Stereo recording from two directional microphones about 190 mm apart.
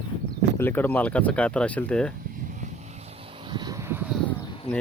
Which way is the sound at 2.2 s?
45° right (ahead or behind).